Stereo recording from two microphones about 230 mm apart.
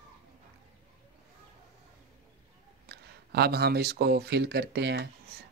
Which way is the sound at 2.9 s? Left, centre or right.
Right.